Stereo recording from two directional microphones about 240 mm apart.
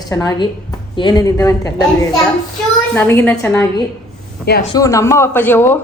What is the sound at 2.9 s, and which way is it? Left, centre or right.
Speech, centre.